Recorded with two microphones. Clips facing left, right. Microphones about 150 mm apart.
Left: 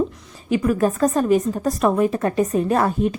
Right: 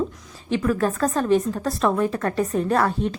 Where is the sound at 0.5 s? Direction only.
10° left (ahead or behind).